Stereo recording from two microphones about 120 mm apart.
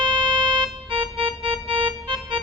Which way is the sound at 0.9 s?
50° right (ahead or behind).